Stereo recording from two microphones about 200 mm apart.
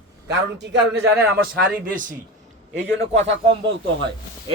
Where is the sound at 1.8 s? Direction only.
40° right (ahead or behind).